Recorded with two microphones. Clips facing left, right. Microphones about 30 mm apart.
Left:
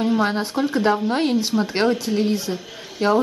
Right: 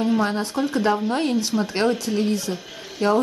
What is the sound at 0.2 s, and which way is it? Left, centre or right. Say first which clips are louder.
Speech: left 2 dB; centre.